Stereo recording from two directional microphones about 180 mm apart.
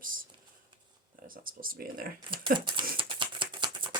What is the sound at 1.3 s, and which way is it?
Speech, 50° right (ahead or behind).